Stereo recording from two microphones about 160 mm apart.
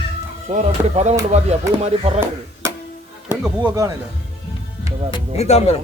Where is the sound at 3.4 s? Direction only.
10° right (ahead or behind).